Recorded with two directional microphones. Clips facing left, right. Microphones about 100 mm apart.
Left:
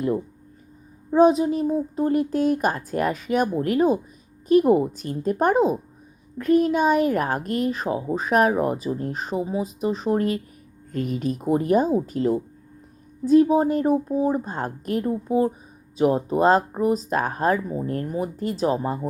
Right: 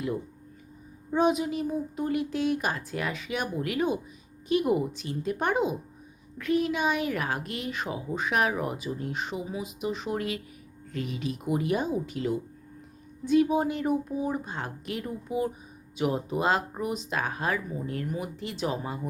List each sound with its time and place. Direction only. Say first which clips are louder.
1.1 s speech: left 8 dB; 35° left (ahead or behind)